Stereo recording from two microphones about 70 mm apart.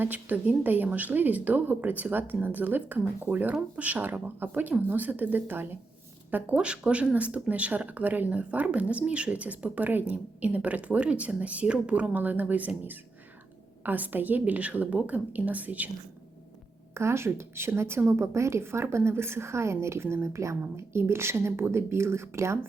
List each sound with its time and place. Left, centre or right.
0.0 s speech: right
6.6 s speech: centre
16.9 s speech: right